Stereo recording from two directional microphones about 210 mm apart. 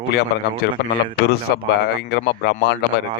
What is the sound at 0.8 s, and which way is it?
Speech, 50° left (ahead or behind).